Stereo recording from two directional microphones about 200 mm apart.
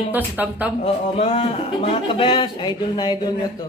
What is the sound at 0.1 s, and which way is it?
Speech, 10° right (ahead or behind).